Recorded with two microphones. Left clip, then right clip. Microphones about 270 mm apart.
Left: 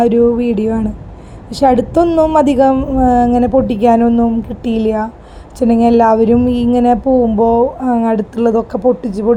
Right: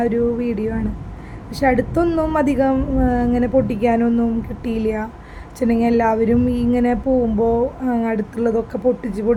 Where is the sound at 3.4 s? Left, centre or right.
Centre.